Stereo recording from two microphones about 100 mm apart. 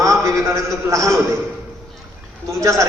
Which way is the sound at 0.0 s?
30° right (ahead or behind).